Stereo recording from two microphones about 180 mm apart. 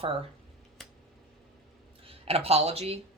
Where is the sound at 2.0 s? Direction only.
35° right (ahead or behind).